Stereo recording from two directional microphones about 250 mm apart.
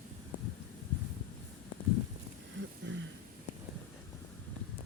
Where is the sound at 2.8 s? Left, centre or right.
Right.